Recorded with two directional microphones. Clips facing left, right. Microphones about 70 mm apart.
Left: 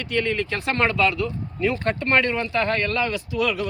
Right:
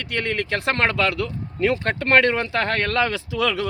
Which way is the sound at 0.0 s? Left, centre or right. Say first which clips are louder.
Left 1 dB; right.